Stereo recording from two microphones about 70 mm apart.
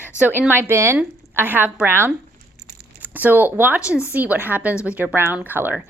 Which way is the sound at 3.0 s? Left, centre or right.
Right.